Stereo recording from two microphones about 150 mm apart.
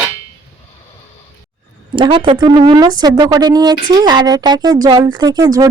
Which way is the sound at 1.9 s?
35° right (ahead or behind).